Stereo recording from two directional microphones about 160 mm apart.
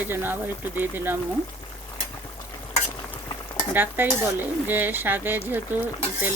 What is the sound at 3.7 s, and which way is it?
Speech, 10° right (ahead or behind).